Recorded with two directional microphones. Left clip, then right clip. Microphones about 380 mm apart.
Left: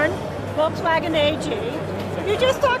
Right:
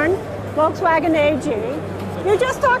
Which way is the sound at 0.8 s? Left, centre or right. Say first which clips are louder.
Right 4 dB; right.